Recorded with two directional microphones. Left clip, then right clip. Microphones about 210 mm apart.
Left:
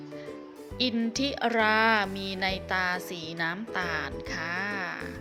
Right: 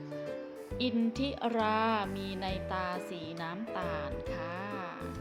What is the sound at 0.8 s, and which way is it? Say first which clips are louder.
Speech: left 5 dB; 25° left (ahead or behind).